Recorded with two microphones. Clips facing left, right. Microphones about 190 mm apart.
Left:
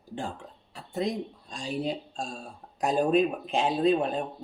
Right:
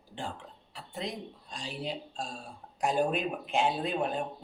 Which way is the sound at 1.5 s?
45° left (ahead or behind).